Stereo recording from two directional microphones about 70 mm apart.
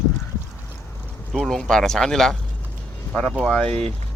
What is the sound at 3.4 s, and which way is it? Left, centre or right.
Speech, centre.